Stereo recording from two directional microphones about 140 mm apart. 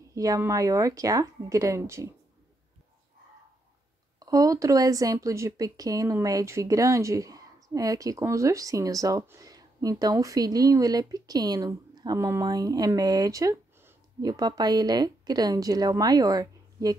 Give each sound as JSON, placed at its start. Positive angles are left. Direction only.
{"t": 0.1, "sound": "speech", "side_deg": -25}
{"t": 4.2, "sound": "speech", "side_deg": -25}